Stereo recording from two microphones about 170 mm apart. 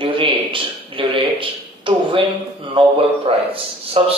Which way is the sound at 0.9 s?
30° right (ahead or behind).